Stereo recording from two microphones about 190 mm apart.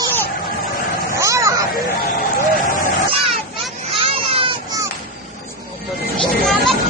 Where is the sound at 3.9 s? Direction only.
25° right (ahead or behind).